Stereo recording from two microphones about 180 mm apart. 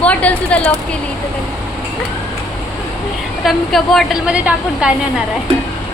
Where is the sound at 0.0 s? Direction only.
5° left (ahead or behind).